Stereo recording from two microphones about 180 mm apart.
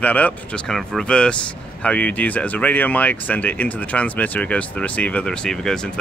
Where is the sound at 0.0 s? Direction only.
10° left (ahead or behind).